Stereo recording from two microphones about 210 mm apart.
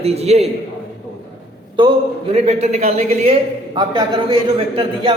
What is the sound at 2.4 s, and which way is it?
Speech, 30° right (ahead or behind).